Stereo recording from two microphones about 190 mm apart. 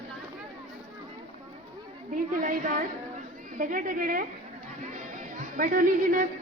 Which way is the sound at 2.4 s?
45° right (ahead or behind).